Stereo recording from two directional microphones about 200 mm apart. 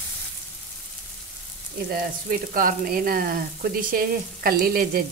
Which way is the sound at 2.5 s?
45° right (ahead or behind).